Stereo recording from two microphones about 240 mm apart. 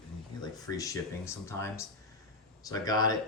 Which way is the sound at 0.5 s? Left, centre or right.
Centre.